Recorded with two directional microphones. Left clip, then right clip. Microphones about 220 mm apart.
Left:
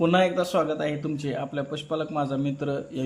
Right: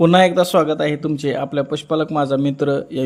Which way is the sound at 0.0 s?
30° right (ahead or behind).